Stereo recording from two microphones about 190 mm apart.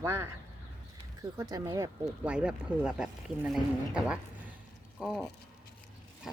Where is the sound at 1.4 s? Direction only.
15° right (ahead or behind); by 5.2 s centre (ahead or behind).